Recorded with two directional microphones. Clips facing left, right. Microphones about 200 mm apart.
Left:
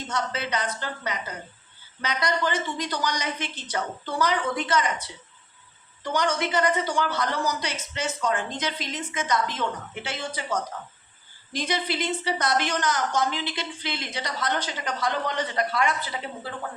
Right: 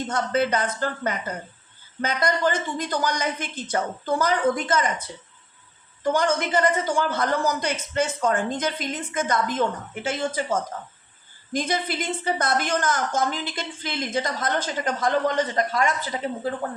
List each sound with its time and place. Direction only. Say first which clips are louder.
0.1 s a woman's voice: right 6 dB; 50° right (ahead or behind)